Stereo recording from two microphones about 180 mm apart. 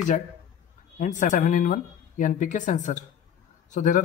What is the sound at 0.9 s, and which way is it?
Speech, 45° left (ahead or behind).